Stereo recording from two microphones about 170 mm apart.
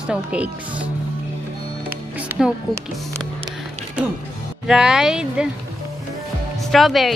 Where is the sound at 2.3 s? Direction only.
15° right (ahead or behind).